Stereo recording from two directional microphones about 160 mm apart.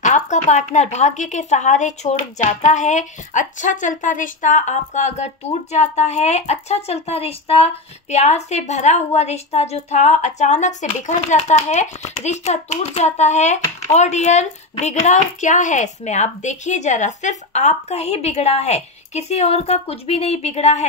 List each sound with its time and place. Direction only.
0.0 s speech: 50° left (ahead or behind)